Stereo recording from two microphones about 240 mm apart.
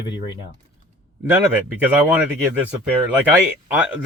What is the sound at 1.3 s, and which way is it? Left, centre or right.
Speech, centre.